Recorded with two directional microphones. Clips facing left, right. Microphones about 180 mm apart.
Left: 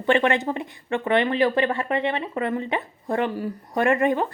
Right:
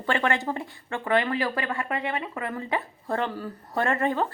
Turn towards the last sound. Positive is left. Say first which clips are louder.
# left 5 dB
turn(degrees=15)  # may be behind; listen again after turning